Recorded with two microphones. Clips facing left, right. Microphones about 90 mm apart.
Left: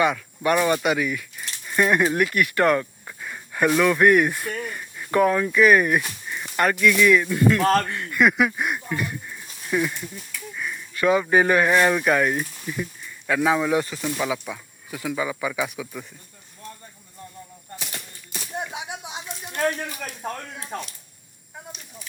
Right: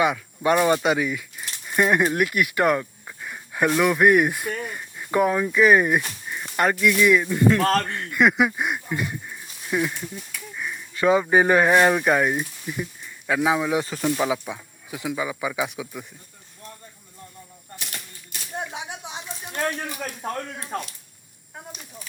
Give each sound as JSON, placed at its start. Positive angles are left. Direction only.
{"t": 0.0, "sound": "speech", "side_deg": -15}
{"t": 1.4, "sound": "a sound", "side_deg": -10}
{"t": 3.8, "sound": "speech", "side_deg": -10}
{"t": 7.6, "sound": "speech", "side_deg": 15}
{"t": 7.9, "sound": "speech", "side_deg": -20}
{"t": 18.7, "sound": "a sound", "side_deg": 15}
{"t": 19.6, "sound": "speech", "side_deg": -10}